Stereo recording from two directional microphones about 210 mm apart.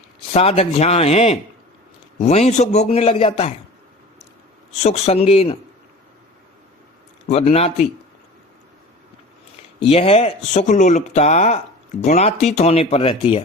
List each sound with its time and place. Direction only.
0.3 s speech: 30° left (ahead or behind)
4.7 s speech: 30° left (ahead or behind)
7.3 s speech: 30° left (ahead or behind)
9.8 s speech: 30° left (ahead or behind)